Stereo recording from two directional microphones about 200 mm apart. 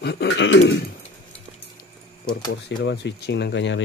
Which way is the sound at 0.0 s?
55° left (ahead or behind).